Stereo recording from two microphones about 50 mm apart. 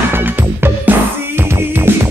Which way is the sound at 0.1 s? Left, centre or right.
Right.